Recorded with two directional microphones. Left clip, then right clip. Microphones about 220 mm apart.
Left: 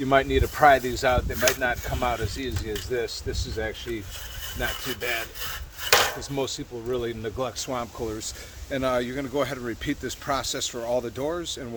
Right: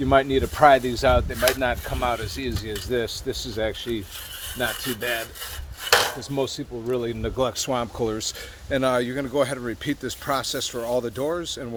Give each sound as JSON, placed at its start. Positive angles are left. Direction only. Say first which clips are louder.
{"t": 0.1, "sound": "speech", "louder": "right 2 dB", "side_deg": -30}
{"t": 6.3, "sound": "speech", "louder": "right 3 dB", "side_deg": -35}
{"t": 8.7, "sound": "speech", "louder": "right 3 dB", "side_deg": -30}